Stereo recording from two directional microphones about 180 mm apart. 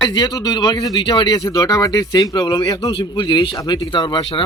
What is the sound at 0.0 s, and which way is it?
A man's voice, 25° left (ahead or behind).